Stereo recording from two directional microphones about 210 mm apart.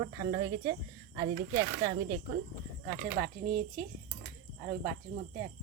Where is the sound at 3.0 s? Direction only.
45° right (ahead or behind).